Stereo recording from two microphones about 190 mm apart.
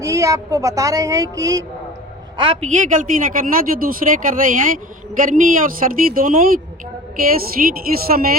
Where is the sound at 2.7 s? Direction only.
40° right (ahead or behind).